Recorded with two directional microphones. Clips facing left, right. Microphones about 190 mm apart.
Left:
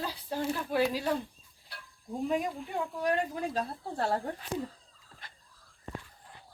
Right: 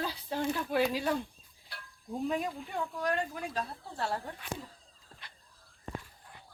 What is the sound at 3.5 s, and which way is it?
Speech, 45° left (ahead or behind).